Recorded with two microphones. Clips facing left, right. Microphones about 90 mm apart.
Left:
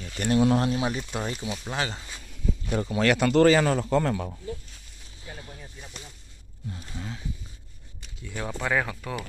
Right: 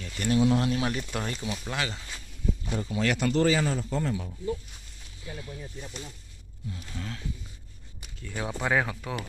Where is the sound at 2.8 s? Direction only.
60° left (ahead or behind).